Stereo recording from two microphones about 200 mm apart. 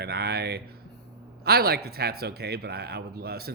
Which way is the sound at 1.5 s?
50° right (ahead or behind).